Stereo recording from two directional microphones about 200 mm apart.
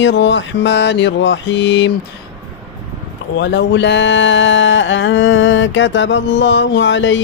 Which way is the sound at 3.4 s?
55° left (ahead or behind).